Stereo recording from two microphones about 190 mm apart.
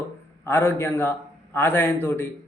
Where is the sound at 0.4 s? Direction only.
10° left (ahead or behind).